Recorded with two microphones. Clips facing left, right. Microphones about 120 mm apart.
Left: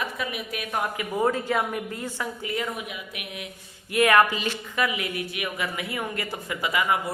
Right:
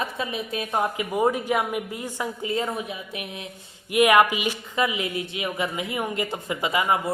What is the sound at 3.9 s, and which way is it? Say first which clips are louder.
A woman's voice: right 2 dB; 15° right (ahead or behind).